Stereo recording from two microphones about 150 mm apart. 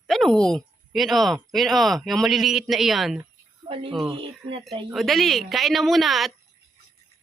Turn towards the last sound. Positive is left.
turn(degrees=0)  # may be behind; listen again after turning